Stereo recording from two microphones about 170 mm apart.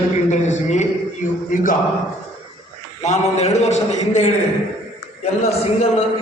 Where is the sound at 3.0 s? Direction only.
40° left (ahead or behind).